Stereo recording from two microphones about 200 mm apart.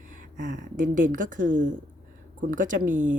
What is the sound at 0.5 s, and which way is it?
Speech, 40° right (ahead or behind).